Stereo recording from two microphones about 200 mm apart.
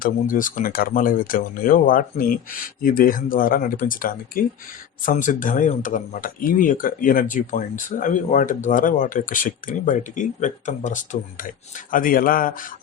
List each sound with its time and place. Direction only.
0.0 s speech: 40° left (ahead or behind)